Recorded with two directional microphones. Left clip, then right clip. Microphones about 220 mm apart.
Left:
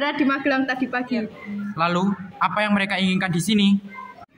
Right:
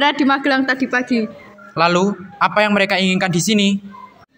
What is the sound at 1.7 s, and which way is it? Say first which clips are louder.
A man's voice: right 7 dB; 25° right (ahead or behind).